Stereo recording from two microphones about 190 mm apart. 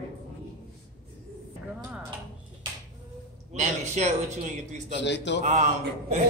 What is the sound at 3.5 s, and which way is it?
Speech, 35° right (ahead or behind).